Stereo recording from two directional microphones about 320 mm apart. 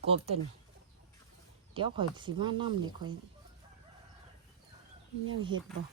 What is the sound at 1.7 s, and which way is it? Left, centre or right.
Speech, centre.